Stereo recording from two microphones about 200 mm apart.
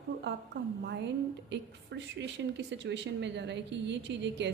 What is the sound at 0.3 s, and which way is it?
Speech, 60° right (ahead or behind).